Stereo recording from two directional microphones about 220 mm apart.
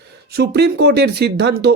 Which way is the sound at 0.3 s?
45° right (ahead or behind).